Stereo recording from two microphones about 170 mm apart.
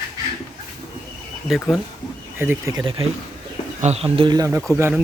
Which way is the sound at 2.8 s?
30° right (ahead or behind).